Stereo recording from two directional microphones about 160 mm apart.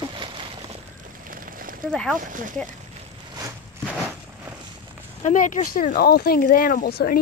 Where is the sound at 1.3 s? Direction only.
60° right (ahead or behind).